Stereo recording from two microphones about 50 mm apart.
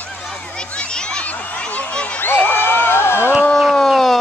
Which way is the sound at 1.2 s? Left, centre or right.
Left.